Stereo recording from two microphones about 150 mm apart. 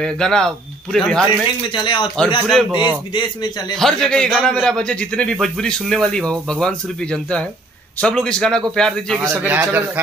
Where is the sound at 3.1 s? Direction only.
25° left (ahead or behind).